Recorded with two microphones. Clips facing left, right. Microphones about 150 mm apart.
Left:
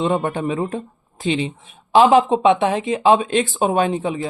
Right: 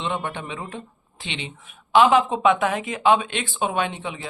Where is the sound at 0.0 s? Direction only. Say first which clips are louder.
Left 8 dB; 40° left (ahead or behind).